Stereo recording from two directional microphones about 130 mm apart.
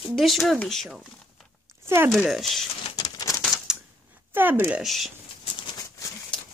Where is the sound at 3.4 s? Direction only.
Centre (ahead or behind).